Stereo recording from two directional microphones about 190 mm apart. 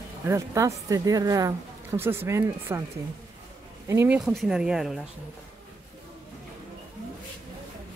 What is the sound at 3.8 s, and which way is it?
Speech, 15° right (ahead or behind).